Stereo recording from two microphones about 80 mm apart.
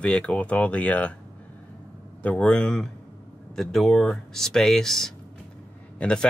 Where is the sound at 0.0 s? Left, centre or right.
Centre.